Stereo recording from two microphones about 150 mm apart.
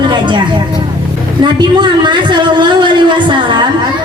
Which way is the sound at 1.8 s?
30° right (ahead or behind).